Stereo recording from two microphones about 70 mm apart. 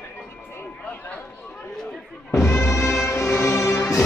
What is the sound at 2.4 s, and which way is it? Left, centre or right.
Music, left.